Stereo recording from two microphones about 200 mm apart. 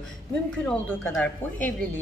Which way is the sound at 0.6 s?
10° left (ahead or behind).